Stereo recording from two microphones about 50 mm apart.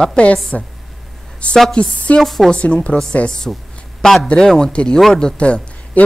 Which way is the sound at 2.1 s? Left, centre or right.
Centre.